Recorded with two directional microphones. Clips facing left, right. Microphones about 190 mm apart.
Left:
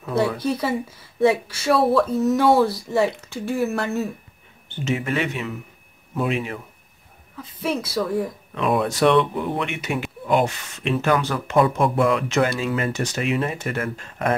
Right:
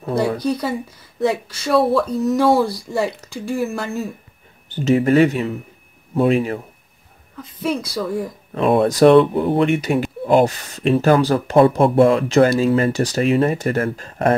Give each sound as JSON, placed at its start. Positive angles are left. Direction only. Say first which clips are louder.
{"t": 0.4, "sound": "speech", "louder": "right 2 dB", "side_deg": 5}
{"t": 4.6, "sound": "speech", "louder": "right 9 dB", "side_deg": -35}
{"t": 7.3, "sound": "speech", "louder": "right 3 dB", "side_deg": 5}
{"t": 8.5, "sound": "speech", "louder": "right 6 dB", "side_deg": -35}